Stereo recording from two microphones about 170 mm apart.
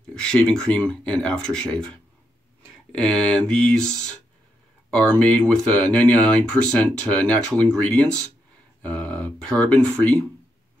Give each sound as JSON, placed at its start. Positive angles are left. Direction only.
{"t": 0.1, "sound": "speech", "side_deg": 5}